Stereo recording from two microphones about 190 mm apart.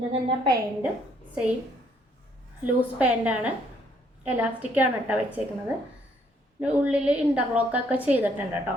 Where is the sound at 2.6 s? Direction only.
10° right (ahead or behind).